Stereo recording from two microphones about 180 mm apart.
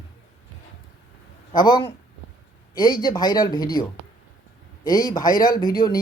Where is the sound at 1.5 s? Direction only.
25° left (ahead or behind).